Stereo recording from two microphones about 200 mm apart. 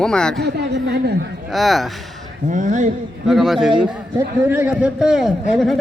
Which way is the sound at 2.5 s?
40° right (ahead or behind).